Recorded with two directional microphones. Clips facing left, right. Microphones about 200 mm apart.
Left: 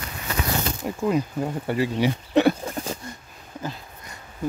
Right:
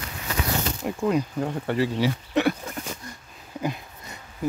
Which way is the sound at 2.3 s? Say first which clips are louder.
Left 7 dB; 30° left (ahead or behind).